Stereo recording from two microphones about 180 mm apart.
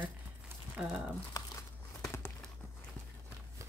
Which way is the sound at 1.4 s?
20° left (ahead or behind).